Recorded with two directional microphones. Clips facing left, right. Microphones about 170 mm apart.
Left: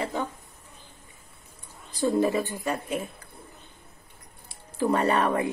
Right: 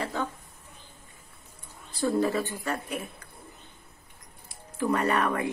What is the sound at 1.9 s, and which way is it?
A woman's voice, 15° left (ahead or behind).